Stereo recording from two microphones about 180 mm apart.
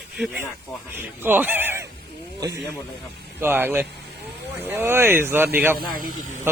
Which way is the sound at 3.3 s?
10° right (ahead or behind).